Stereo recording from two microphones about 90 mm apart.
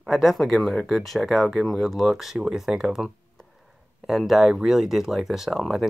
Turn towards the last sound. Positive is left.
turn(degrees=0)  # may be behind; listen again after turning